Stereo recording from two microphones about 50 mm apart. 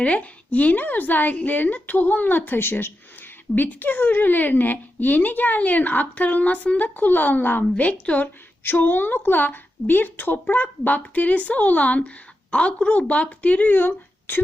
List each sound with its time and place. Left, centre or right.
0.0 s a woman's voice: left
2.6 s a woman's voice: left